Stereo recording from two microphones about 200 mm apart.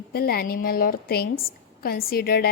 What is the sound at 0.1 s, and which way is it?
A woman's voice, 50° left (ahead or behind).